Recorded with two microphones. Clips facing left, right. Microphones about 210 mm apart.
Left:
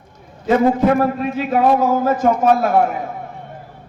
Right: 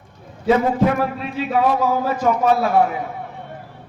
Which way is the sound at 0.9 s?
50° left (ahead or behind).